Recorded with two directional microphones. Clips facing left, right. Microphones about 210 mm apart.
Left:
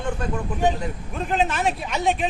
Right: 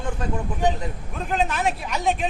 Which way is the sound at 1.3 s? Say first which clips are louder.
Left 1 dB; centre (ahead or behind).